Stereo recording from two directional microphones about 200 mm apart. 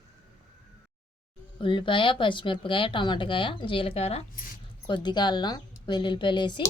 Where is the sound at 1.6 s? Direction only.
25° left (ahead or behind).